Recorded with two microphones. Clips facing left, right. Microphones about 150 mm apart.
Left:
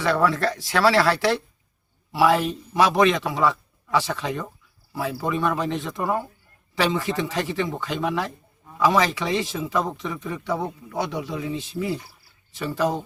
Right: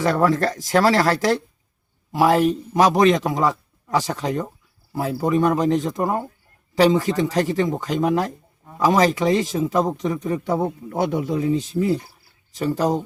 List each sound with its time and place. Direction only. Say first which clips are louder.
0.0 s a man's voice: right 3 dB; 45° right (ahead or behind)